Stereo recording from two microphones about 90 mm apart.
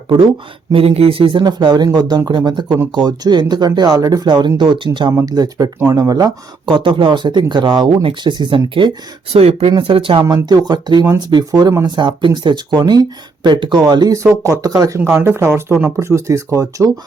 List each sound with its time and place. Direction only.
0.7 s speech: 90° right; by 4.9 s 60° right (ahead or behind)
5.2 s speech: 45° right (ahead or behind)
6.7 s speech: 65° right (ahead or behind)
9.3 s speech: 90° right
10.2 s speech: 45° right (ahead or behind)
11.9 s speech: 60° right (ahead or behind); by 16.9 s 35° right (ahead or behind)